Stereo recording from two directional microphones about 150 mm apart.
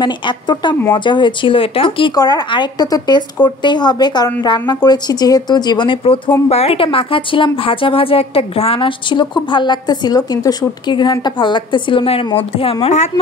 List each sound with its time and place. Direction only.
0.0 s a woman's voice: 30° left (ahead or behind); by 13.1 s 50° left (ahead or behind)